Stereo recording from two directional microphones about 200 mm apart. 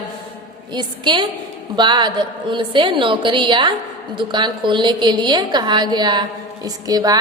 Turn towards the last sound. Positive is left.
turn(degrees=-20)  # may be behind; listen again after turning